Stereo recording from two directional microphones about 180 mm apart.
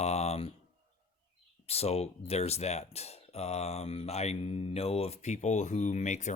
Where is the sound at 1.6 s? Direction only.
35° left (ahead or behind).